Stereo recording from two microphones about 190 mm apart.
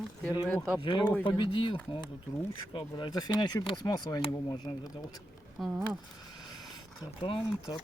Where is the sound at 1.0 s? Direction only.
10° left (ahead or behind).